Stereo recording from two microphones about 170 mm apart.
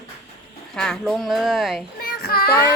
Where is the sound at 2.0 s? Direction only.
65° left (ahead or behind).